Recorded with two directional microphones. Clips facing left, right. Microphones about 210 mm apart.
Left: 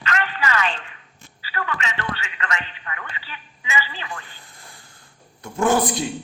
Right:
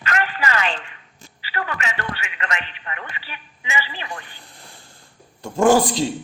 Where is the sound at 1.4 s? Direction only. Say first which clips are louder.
Right 1 dB; 30° right (ahead or behind).